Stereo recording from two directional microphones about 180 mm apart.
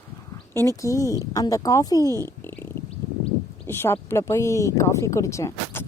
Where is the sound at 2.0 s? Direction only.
20° right (ahead or behind).